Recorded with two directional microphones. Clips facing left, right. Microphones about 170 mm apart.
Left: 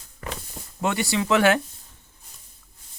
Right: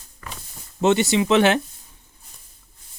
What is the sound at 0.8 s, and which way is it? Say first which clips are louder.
Speech: right 7 dB; 25° right (ahead or behind).